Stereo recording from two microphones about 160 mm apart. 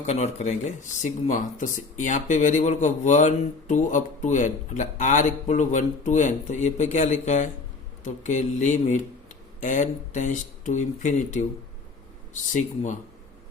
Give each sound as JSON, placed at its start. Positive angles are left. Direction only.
{"t": 0.0, "sound": "speech", "side_deg": 45}
{"t": 12.5, "sound": "speech", "side_deg": 50}